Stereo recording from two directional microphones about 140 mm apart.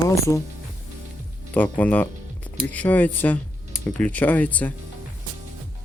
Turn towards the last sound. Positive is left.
turn(degrees=10)  # may be behind; listen again after turning